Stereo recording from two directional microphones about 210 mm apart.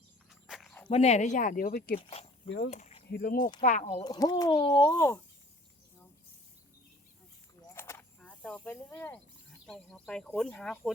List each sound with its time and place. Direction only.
0.3 s walk: centre (ahead or behind)
0.9 s speech: 30° left (ahead or behind)
2.0 s speech: 25° left (ahead or behind)
3.1 s speech: 45° left (ahead or behind)
3.8 s speech: 20° left (ahead or behind)
7.7 s snake: 10° left (ahead or behind)
9.6 s speech: 5° left (ahead or behind)